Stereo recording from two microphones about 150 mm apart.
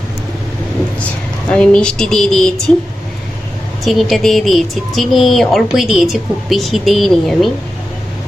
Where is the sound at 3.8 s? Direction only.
Centre (ahead or behind).